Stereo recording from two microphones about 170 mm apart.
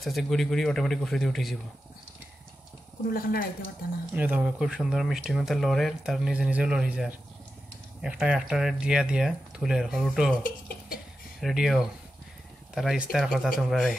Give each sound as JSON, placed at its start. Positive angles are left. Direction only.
{"t": 0.0, "sound": "speech", "side_deg": 0}
{"t": 3.1, "sound": "speech", "side_deg": 60}
{"t": 4.1, "sound": "speech", "side_deg": -10}
{"t": 11.4, "sound": "speech", "side_deg": 0}